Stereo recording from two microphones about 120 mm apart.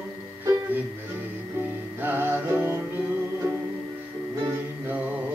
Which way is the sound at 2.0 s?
15° right (ahead or behind).